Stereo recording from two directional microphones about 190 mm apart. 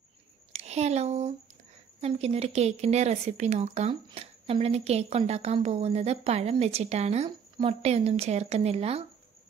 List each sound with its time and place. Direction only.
0.5 s speech: 35° right (ahead or behind)